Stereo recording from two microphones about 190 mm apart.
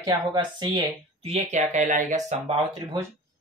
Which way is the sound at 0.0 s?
20° right (ahead or behind).